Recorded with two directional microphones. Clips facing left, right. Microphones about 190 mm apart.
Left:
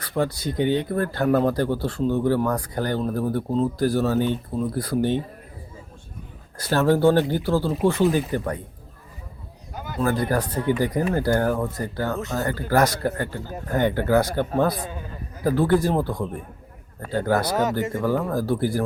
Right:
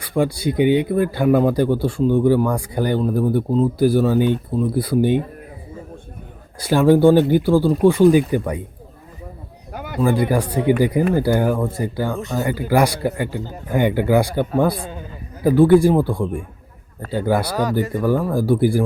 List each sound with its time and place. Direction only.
0.0 s speech: 10° right (ahead or behind)
6.6 s speech: 10° right (ahead or behind)
9.7 s a sound: 65° right (ahead or behind)
10.0 s speech: 10° right (ahead or behind)
17.5 s speech: 20° left (ahead or behind)
18.0 s speech: 10° right (ahead or behind)